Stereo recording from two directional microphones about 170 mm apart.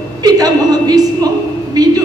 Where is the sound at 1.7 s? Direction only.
20° right (ahead or behind).